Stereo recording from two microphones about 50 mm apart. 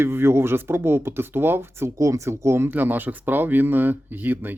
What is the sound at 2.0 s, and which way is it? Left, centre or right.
Speech, right.